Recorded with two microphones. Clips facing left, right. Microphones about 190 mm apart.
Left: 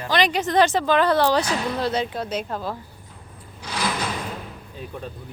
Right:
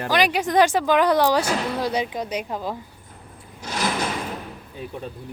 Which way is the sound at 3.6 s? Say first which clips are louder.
Right 1 dB; 45° right (ahead or behind).